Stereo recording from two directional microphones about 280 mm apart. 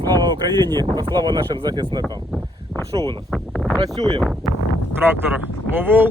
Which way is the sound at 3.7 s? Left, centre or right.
Centre.